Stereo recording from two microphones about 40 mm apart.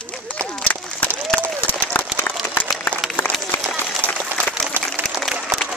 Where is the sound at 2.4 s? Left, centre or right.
Left.